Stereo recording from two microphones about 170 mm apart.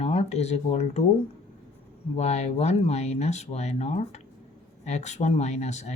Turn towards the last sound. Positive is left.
turn(degrees=40)  # may be behind; listen again after turning